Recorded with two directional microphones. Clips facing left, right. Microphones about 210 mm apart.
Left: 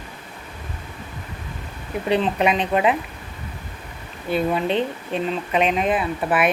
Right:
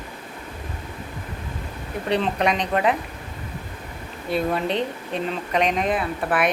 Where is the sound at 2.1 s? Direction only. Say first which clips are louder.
Left 2 dB; 5° left (ahead or behind).